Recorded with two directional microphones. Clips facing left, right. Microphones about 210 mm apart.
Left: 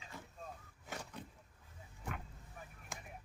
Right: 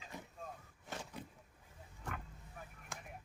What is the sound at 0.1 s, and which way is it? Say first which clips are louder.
Vehicle: right 2 dB; 15° right (ahead or behind).